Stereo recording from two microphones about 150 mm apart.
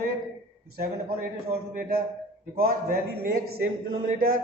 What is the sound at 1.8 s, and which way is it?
A man's voice, 85° right.